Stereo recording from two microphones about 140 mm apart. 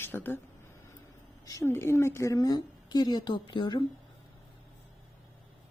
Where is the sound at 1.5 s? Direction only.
20° left (ahead or behind).